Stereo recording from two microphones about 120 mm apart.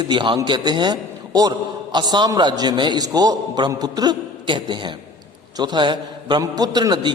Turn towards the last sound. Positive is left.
turn(degrees=-40)  # may be behind; listen again after turning